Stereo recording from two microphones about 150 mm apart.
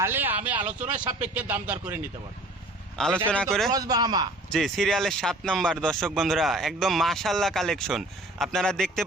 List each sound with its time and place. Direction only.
0.0 s a sound: 15° right (ahead or behind)
1.2 s speech: 10° right (ahead or behind)
3.0 s speech: 5° left (ahead or behind)
3.7 s a man's voice: 25° right (ahead or behind)
4.5 s speech: centre (ahead or behind)